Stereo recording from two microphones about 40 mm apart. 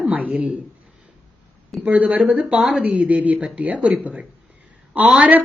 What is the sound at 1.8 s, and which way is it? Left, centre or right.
Speech, right.